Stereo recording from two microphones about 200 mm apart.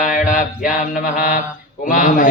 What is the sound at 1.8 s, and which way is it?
Speech, 40° left (ahead or behind).